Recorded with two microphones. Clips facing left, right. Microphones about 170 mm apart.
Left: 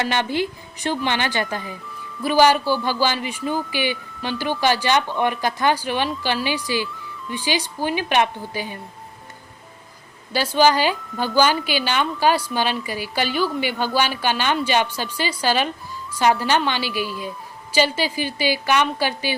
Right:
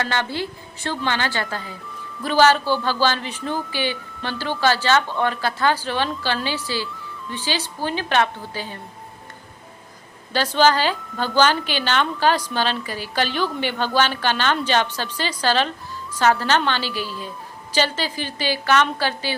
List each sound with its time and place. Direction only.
0.0 s a woman's voice: 15° left (ahead or behind)
10.3 s a woman's voice: 10° left (ahead or behind)